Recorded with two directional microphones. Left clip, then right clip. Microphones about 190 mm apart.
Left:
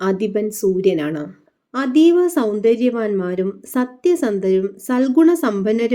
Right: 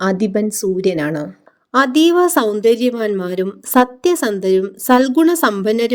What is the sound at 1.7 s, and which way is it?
A woman's voice, 50° right (ahead or behind).